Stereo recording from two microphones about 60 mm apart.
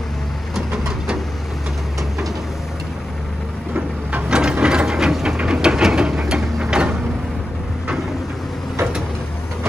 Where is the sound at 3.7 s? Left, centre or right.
Right.